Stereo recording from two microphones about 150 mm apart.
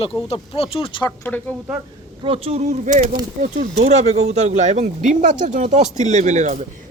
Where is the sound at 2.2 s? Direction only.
40° right (ahead or behind).